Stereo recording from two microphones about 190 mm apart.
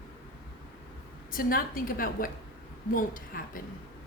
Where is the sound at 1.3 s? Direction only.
50° left (ahead or behind).